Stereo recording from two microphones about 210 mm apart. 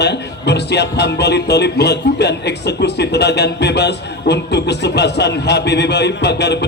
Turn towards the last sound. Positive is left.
turn(degrees=55)  # may be behind; listen again after turning